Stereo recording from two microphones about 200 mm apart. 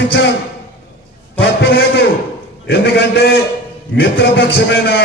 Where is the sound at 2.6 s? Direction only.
60° left (ahead or behind).